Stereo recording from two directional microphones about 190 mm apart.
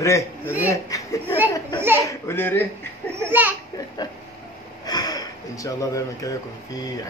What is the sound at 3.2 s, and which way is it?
Speech, 10° right (ahead or behind).